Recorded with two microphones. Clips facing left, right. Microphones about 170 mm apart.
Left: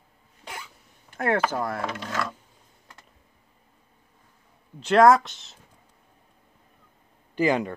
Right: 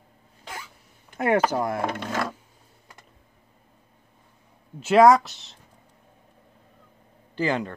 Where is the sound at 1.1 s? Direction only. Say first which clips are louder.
Right 3 dB; 15° right (ahead or behind).